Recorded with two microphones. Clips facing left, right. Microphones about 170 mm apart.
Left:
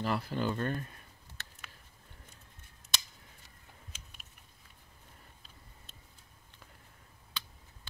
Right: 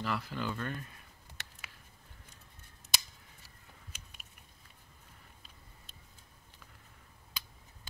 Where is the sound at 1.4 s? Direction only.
15° right (ahead or behind).